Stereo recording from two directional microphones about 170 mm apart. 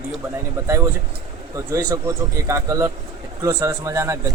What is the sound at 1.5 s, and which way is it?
A man's voice, 20° right (ahead or behind).